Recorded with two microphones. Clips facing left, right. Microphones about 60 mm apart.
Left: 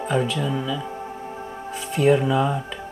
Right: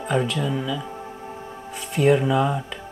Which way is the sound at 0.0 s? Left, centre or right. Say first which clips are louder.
Even; centre.